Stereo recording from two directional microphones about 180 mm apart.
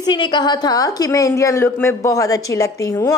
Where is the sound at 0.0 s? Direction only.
25° left (ahead or behind).